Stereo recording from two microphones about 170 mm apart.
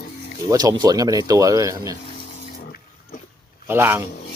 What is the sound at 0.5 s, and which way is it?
Speech, 20° right (ahead or behind).